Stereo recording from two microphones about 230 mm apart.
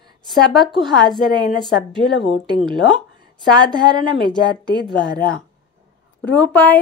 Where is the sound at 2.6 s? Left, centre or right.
Right.